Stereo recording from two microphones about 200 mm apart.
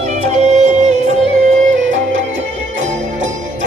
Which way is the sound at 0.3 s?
35° right (ahead or behind).